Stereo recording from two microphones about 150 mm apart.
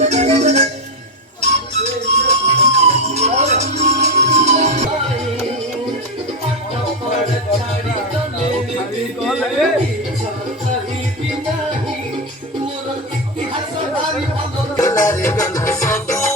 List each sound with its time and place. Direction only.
0.0 s music: 50° right (ahead or behind)
9.2 s a sound: centre (ahead or behind)
14.8 s music: 20° left (ahead or behind)